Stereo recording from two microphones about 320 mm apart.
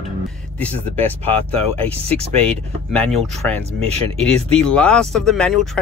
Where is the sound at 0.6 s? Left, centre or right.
Centre.